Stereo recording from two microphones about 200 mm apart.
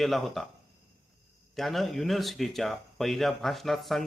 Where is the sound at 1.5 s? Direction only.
Centre (ahead or behind).